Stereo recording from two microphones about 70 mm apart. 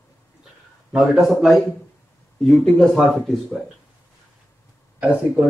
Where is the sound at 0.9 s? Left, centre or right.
Centre.